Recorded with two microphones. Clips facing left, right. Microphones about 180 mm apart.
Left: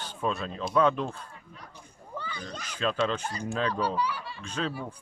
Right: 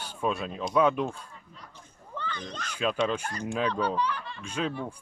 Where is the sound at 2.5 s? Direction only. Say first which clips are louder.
Right 1 dB; 10° left (ahead or behind).